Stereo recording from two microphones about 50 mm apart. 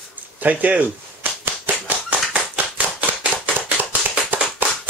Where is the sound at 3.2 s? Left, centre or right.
Right.